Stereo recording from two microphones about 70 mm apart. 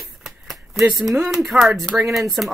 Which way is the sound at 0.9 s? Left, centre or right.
Centre.